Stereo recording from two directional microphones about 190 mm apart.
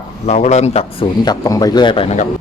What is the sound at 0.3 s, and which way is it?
Speech, 35° left (ahead or behind).